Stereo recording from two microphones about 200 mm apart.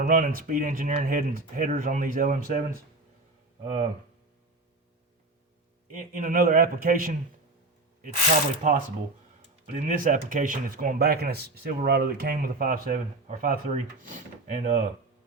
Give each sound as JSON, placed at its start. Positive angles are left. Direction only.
{"t": 0.0, "sound": "speech", "side_deg": -45}
{"t": 5.9, "sound": "speech", "side_deg": -40}
{"t": 8.6, "sound": "speech", "side_deg": -40}
{"t": 9.8, "sound": "speech", "side_deg": -40}